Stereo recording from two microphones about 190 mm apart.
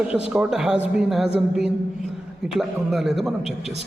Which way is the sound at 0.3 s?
5° right (ahead or behind).